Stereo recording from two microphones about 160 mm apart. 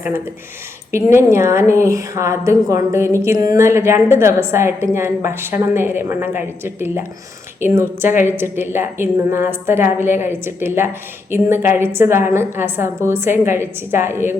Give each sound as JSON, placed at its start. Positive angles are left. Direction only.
{"t": 0.9, "sound": "a woman's voice", "side_deg": -15}